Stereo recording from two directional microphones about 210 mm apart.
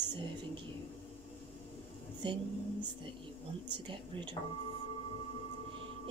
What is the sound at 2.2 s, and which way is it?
Speech, 25° right (ahead or behind).